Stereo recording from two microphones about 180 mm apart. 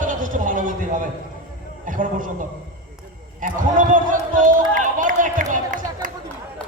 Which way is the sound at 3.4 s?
45° right (ahead or behind).